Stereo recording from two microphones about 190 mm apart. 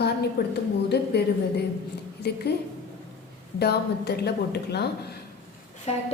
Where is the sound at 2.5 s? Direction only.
65° left (ahead or behind).